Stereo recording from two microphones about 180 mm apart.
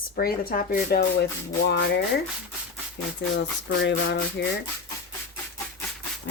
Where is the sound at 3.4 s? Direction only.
75° left (ahead or behind).